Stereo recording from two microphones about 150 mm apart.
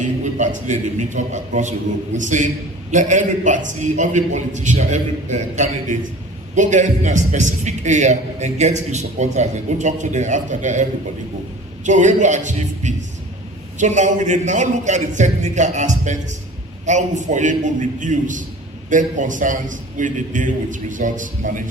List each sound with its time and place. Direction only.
0.0 s a man's voice: 55° right (ahead or behind)
11.9 s a man's voice: 55° right (ahead or behind)